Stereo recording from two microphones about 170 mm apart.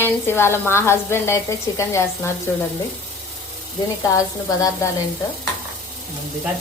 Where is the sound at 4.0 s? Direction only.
20° left (ahead or behind).